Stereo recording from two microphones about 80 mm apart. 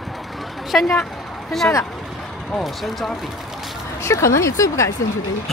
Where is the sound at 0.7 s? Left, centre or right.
Centre.